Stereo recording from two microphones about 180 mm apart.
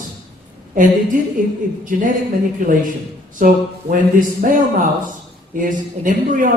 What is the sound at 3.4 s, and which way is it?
Speech, 50° right (ahead or behind).